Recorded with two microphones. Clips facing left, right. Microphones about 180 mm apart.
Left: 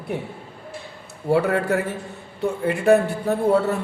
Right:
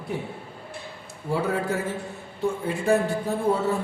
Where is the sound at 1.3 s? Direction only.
65° left (ahead or behind).